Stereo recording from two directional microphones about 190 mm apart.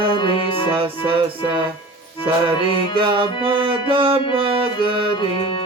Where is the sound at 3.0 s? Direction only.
25° right (ahead or behind).